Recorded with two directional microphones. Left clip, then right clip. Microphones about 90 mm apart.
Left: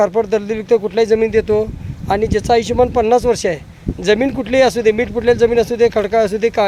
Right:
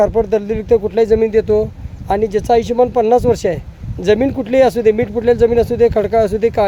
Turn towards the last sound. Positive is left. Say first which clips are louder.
# right 1 dB
turn(degrees=-25)  # may be behind; listen again after turning